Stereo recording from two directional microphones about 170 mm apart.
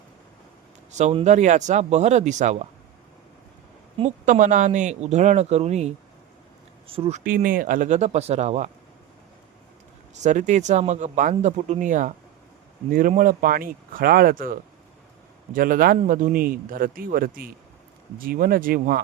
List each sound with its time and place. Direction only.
0.9 s a man's voice: 45° right (ahead or behind)
4.3 s speech: 50° right (ahead or behind)
7.3 s speech: 55° right (ahead or behind)
10.2 s speech: 45° right (ahead or behind)